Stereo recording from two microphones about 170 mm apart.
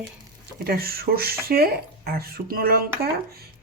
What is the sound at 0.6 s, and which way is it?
Speech, 60° right (ahead or behind).